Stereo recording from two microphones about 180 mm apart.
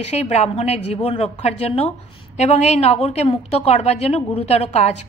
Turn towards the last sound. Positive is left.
turn(degrees=35)  # may be behind; listen again after turning